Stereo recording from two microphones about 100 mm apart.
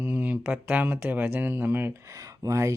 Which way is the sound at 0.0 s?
20° right (ahead or behind).